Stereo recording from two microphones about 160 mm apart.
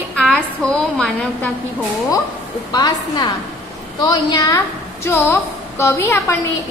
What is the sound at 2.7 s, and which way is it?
A woman's voice, 25° left (ahead or behind).